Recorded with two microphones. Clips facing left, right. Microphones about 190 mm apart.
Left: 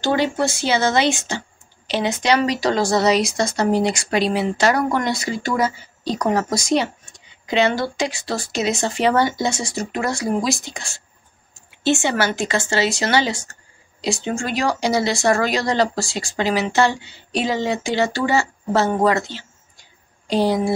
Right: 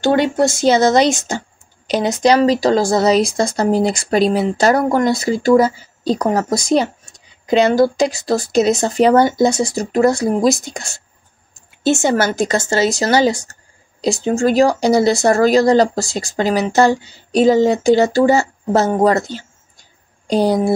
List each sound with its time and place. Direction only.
0.0 s speech: 55° right (ahead or behind)